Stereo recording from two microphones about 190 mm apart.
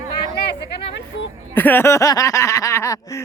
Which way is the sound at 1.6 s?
10° left (ahead or behind).